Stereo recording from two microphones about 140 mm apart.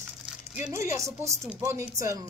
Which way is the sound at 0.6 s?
20° right (ahead or behind).